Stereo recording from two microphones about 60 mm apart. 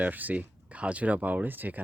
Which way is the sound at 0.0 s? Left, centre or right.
Right.